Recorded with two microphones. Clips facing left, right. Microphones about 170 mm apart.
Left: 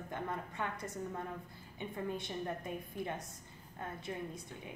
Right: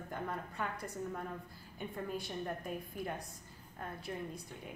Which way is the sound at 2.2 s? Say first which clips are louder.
Even; centre (ahead or behind).